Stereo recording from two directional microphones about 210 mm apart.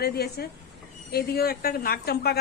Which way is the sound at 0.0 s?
50° left (ahead or behind).